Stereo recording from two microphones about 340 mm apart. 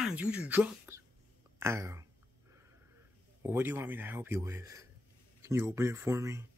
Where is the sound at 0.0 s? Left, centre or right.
Centre.